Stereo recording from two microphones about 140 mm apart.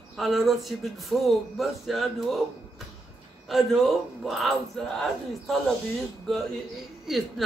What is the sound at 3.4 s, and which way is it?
Speech, centre (ahead or behind).